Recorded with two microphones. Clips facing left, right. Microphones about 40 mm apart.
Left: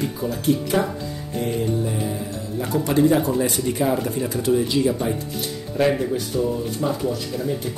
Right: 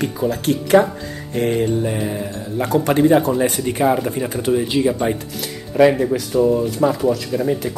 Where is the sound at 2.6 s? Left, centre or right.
Right.